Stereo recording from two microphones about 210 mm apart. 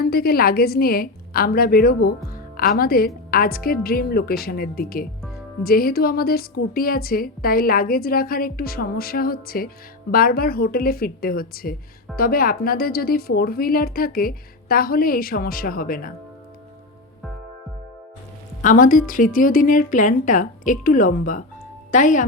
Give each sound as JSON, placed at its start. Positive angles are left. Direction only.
{"t": 0.0, "sound": "a woman's voice", "side_deg": 45}
{"t": 18.6, "sound": "a woman's voice", "side_deg": 40}